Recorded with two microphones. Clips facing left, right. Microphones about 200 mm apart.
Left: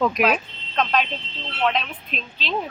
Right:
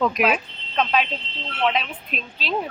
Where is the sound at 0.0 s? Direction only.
Centre (ahead or behind).